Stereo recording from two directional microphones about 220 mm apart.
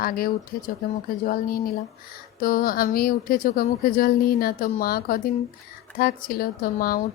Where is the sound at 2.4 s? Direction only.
40° left (ahead or behind).